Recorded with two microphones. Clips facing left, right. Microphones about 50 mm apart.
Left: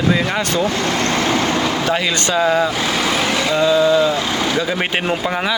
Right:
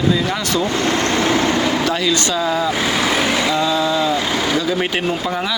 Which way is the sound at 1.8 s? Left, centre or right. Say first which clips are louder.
Even; left.